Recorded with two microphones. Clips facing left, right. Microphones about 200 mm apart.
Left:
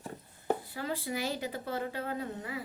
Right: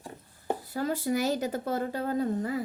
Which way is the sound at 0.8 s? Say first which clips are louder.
Right 7 dB; 45° right (ahead or behind).